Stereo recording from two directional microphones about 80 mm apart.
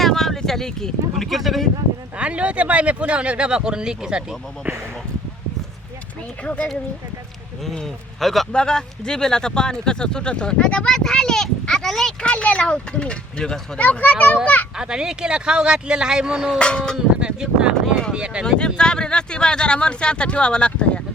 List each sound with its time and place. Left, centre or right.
0.0 s speech: centre
2.1 s speech: centre
6.4 s speech: centre
7.6 s a man's voice: centre
14.8 s speech: centre
16.6 s a man's voice: centre
17.2 s speech: centre
18.4 s a man's voice: centre